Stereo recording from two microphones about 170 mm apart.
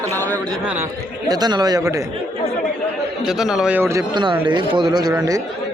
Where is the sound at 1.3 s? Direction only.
25° right (ahead or behind).